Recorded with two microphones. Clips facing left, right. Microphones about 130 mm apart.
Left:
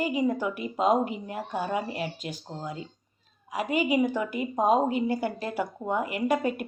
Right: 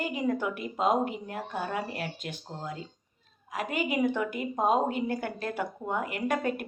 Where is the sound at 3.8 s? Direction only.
5° left (ahead or behind).